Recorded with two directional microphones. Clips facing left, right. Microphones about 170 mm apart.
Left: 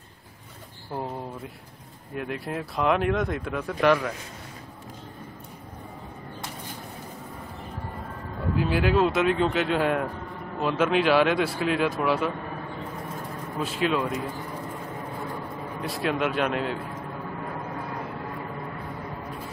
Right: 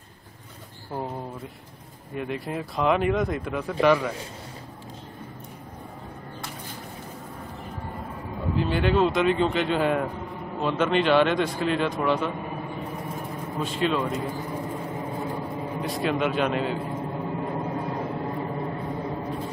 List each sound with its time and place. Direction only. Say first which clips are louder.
0.9 s speech: even; centre (ahead or behind)
8.5 s speech: even; 5° left (ahead or behind)
12.4 s a sound: right 2 dB; 15° right (ahead or behind)
13.6 s speech: even; centre (ahead or behind)
14.3 s vehicle: right 4 dB; 20° right (ahead or behind)
15.8 s speech: right 1 dB; centre (ahead or behind)
16.8 s a sound: right 5 dB; 25° right (ahead or behind)